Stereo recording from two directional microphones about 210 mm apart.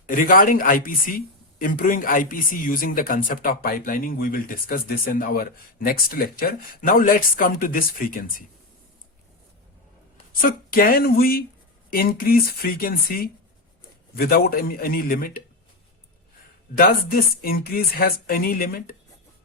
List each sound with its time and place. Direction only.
0.0 s a man's voice: 40° left (ahead or behind)
10.4 s a man's voice: 45° left (ahead or behind)
16.7 s a man's voice: 45° left (ahead or behind)